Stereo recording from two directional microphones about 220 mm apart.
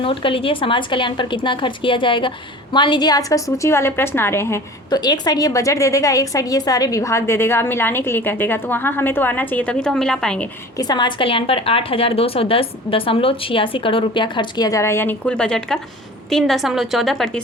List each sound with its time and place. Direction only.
0.0 s a woman's voice: 25° left (ahead or behind); by 10.5 s 5° left (ahead or behind)
10.8 s a woman's voice: 20° left (ahead or behind); by 17.4 s centre (ahead or behind)